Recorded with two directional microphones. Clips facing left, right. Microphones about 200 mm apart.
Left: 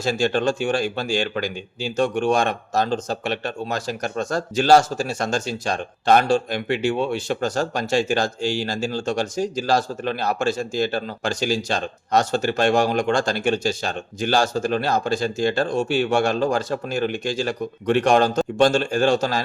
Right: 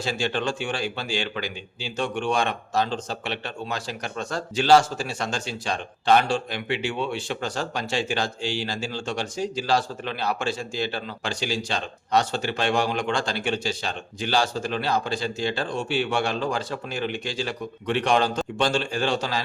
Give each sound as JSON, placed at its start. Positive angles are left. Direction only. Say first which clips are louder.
{"t": 0.0, "sound": "speech", "louder": "left 6 dB", "side_deg": 45}